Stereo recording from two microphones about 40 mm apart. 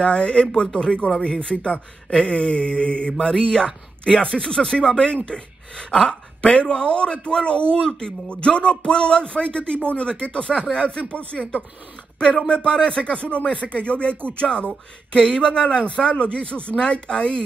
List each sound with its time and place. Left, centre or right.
0.0 s speech: left
3.2 s speech: centre